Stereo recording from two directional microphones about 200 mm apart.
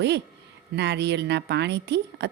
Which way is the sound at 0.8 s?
60° right (ahead or behind).